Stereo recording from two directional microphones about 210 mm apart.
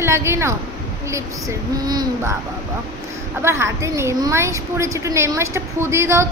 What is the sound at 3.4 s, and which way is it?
Speech, 15° right (ahead or behind).